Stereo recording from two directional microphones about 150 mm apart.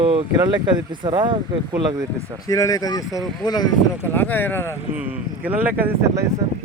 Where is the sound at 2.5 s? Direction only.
25° left (ahead or behind).